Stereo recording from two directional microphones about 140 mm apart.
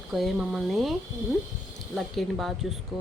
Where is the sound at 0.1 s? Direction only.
Centre (ahead or behind).